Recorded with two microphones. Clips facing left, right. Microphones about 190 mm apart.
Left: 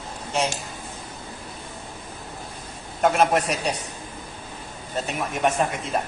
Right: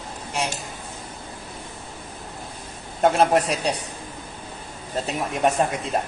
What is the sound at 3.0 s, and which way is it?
Speech, 30° right (ahead or behind).